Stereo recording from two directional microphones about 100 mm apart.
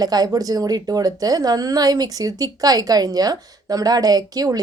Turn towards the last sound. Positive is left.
turn(degrees=-40)  # may be behind; listen again after turning